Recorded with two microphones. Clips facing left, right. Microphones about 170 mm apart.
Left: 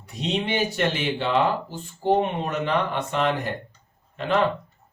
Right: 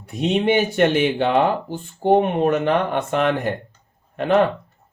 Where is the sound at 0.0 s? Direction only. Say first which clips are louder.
Right 7 dB; 55° right (ahead or behind).